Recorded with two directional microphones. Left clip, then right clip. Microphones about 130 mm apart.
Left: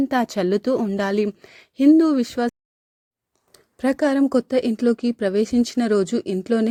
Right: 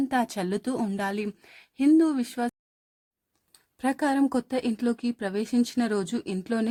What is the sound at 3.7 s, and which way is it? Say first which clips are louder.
A woman's voice: left 6 dB; 20° left (ahead or behind).